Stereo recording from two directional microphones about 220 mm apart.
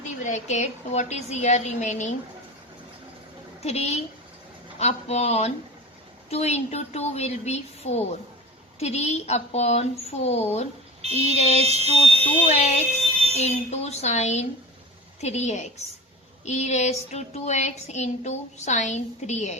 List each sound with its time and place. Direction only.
0.2 s speech: 35° left (ahead or behind)
3.6 s a woman's voice: 30° left (ahead or behind)
11.6 s speech: 30° right (ahead or behind)
12.5 s a woman's voice: 30° left (ahead or behind)